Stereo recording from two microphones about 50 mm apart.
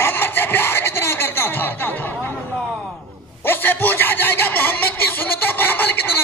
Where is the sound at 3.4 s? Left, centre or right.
Left.